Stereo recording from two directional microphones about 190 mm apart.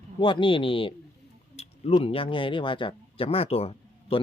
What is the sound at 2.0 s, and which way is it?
Speech, 30° left (ahead or behind).